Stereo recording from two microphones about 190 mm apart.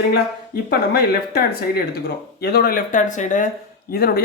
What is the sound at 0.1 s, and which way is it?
Speech, 55° left (ahead or behind).